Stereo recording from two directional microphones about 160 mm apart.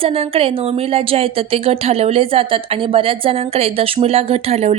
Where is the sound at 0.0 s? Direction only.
40° right (ahead or behind).